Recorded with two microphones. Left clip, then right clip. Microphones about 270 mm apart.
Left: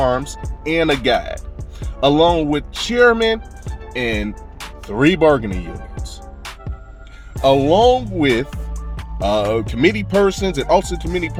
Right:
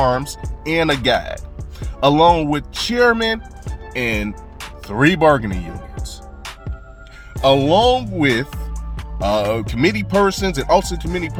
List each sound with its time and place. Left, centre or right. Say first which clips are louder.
0.0 s music: even; centre
0.6 s speech: left 1 dB; centre
6.4 s music: even; centre
7.4 s speech: left 1 dB; centre
9.5 s speech: left 2 dB; centre